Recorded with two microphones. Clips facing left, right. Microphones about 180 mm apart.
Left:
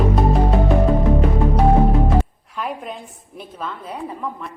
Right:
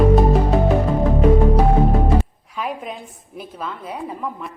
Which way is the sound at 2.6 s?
Centre (ahead or behind).